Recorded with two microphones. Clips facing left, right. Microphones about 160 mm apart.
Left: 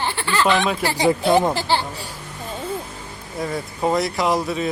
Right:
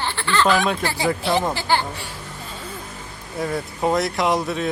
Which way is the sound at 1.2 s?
45° left (ahead or behind).